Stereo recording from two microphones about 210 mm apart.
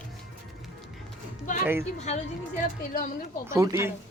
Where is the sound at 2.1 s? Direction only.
30° left (ahead or behind).